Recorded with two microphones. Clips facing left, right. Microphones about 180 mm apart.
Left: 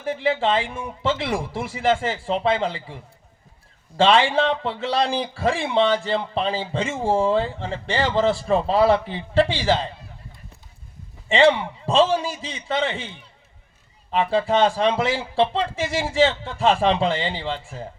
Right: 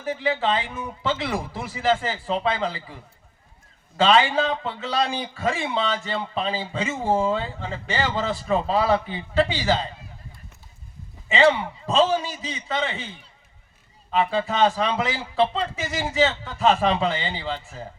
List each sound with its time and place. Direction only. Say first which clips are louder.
0.1 s speech: left 2 dB; 30° left (ahead or behind)
3.9 s a man's voice: left 2 dB; 30° left (ahead or behind)
11.3 s a man's voice: left 2 dB; 30° left (ahead or behind)
14.3 s a man's voice: left 5 dB; 30° left (ahead or behind)